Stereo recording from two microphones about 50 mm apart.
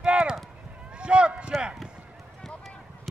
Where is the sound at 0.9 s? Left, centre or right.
Right.